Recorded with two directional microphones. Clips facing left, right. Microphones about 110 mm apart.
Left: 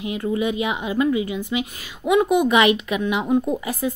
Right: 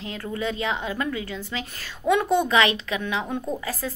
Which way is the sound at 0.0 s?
15° left (ahead or behind).